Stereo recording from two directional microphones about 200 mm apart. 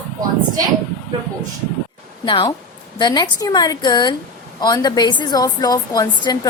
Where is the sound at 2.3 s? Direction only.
25° left (ahead or behind).